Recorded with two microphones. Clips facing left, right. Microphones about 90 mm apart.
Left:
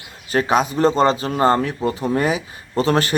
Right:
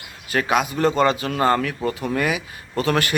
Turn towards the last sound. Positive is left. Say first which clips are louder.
# left 3 dB
turn(degrees=30)  # may be behind; listen again after turning